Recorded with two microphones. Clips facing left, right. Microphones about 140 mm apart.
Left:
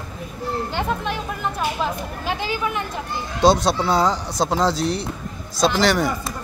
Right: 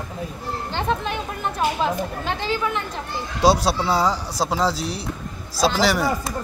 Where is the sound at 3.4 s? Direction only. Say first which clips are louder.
Left 1 dB; 5° right (ahead or behind).